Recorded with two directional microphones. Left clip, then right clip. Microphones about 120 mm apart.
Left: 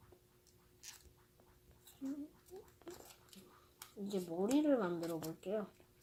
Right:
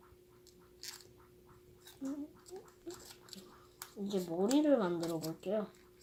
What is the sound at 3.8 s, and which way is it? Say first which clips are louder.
Speech: right 4 dB; 5° right (ahead or behind).